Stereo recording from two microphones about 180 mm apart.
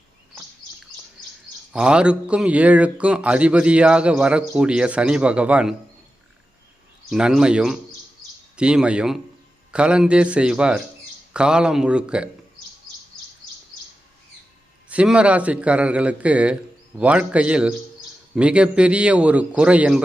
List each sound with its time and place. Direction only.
1.7 s a man's voice: 5° right (ahead or behind)
7.1 s a man's voice: 5° right (ahead or behind)
14.8 s a man's voice: 5° right (ahead or behind)